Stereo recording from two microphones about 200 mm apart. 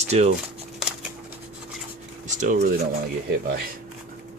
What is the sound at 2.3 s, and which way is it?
Speech, 40° right (ahead or behind).